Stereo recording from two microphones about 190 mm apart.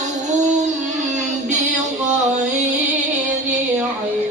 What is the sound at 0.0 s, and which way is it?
Music, 40° right (ahead or behind).